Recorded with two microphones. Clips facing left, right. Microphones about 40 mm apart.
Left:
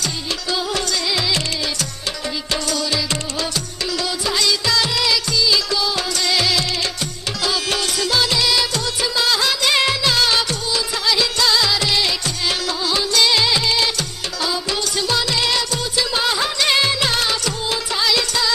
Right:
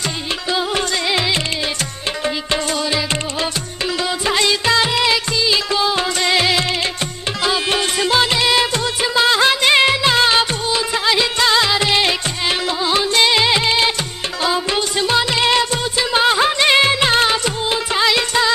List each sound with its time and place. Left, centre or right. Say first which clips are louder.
0.5 s music: right 3 dB; right
4.3 s music of bollywood: right 4 dB; right